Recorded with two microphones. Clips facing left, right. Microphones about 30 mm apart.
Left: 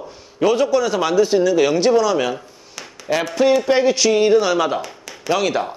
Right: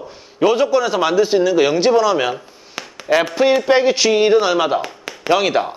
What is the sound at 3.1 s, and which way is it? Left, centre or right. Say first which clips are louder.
A man's voice: right 2 dB; centre.